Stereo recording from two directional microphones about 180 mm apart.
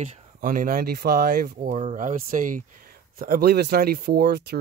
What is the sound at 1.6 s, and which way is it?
Speech, 40° right (ahead or behind).